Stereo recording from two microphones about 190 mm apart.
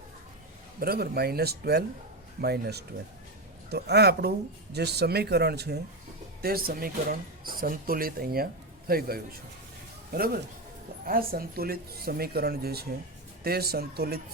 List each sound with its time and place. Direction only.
0.8 s speech: 55° right (ahead or behind)